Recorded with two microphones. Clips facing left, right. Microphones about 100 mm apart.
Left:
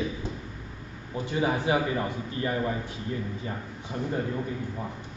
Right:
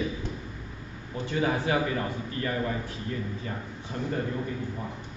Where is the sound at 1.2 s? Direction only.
20° left (ahead or behind).